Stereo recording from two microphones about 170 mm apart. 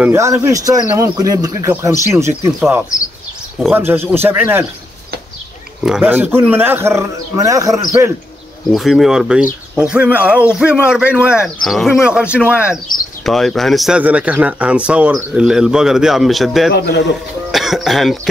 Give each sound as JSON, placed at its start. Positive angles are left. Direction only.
{"t": 0.0, "sound": "a man's voice", "side_deg": -15}
{"t": 3.5, "sound": "a man's voice", "side_deg": -10}
{"t": 5.9, "sound": "a man's voice", "side_deg": -10}
{"t": 8.6, "sound": "speech", "side_deg": 0}
{"t": 16.7, "sound": "speech", "side_deg": 75}
{"t": 17.5, "sound": "speech", "side_deg": 0}